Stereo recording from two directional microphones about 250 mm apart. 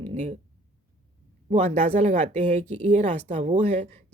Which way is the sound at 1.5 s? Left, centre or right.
Right.